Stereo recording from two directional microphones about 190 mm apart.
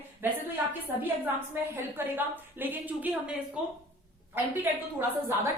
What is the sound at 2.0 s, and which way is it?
A woman's voice, 10° right (ahead or behind).